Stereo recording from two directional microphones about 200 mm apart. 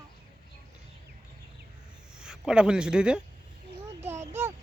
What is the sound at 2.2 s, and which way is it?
Speech, 5° right (ahead or behind).